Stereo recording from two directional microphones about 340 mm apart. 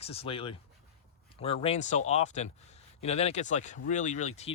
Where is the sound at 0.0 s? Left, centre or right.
Centre.